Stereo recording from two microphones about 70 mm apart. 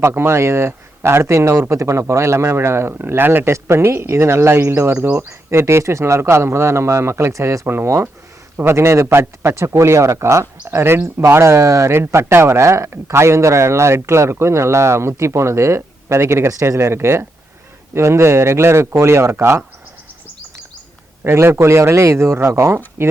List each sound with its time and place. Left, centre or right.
0.0 s a man's voice: right
21.2 s speech: right